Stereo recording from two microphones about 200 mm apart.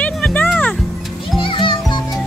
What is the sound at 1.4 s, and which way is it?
Music, 25° left (ahead or behind).